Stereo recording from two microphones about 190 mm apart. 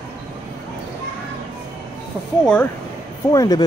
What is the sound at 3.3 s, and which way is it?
Speech, 20° left (ahead or behind).